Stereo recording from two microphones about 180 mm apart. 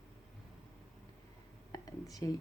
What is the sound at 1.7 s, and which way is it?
Speech, 20° left (ahead or behind).